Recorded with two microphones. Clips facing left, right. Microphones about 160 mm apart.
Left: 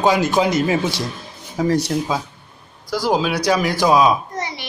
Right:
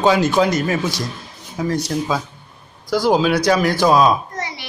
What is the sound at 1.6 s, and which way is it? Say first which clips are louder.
Speech: left 3 dB; 35° left (ahead or behind).